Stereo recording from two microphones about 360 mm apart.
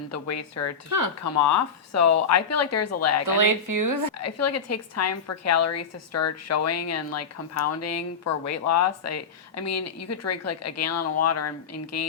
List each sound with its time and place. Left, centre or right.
0.1 s a woman's voice: left
0.9 s speech: right
1.2 s a woman's voice: left
3.2 s speech: right
4.2 s a woman's voice: left